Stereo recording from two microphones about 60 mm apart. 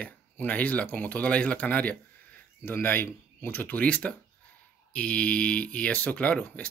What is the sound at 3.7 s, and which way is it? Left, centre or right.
Speech, left.